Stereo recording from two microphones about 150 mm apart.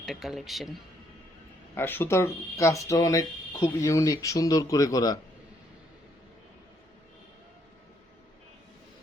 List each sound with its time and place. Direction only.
0.0 s speech: centre (ahead or behind)
1.7 s speech: 15° left (ahead or behind)